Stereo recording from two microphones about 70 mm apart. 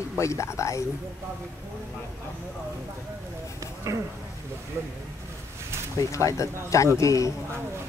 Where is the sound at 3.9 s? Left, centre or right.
Right.